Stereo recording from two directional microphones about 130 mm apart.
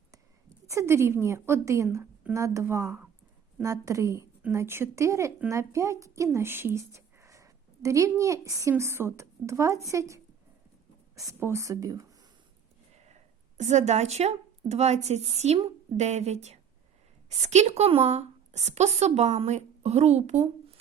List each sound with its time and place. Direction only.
0.7 s a woman's voice: 20° right (ahead or behind)
13.1 s a woman's voice: 60° right (ahead or behind)